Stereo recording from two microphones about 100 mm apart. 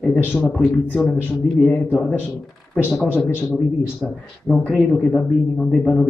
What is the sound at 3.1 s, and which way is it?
Speech, 25° left (ahead or behind).